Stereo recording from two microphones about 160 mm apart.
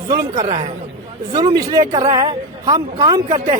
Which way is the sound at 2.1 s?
30° right (ahead or behind).